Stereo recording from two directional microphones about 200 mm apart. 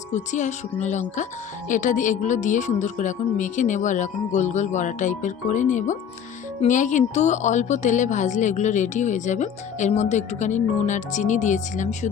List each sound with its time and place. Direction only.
0.1 s a woman's voice: 35° left (ahead or behind)